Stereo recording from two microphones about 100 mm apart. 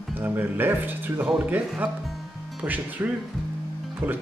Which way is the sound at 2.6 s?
15° right (ahead or behind).